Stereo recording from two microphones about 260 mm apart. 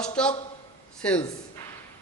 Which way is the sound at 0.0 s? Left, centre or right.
Centre.